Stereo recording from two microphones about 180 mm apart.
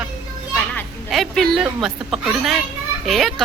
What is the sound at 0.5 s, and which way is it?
Children playing, 5° left (ahead or behind).